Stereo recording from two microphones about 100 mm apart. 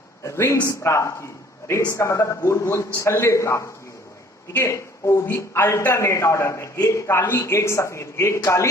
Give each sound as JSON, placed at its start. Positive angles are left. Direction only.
{"t": 0.2, "sound": "a man's voice", "side_deg": 30}
{"t": 6.7, "sound": "speech", "side_deg": 40}
{"t": 7.1, "sound": "speech", "side_deg": 25}